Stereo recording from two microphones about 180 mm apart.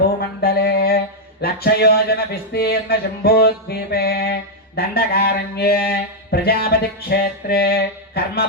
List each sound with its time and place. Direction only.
0.4 s mantra: 60° left (ahead or behind)